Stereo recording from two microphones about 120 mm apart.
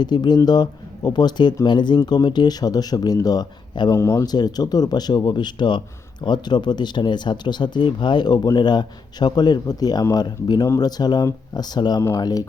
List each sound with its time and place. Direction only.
0.0 s speech: 35° left (ahead or behind)
3.9 s speech: 20° left (ahead or behind)
4.3 s speech: 35° left (ahead or behind)